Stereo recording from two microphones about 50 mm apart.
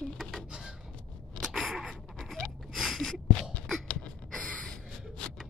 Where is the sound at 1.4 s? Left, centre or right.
Centre.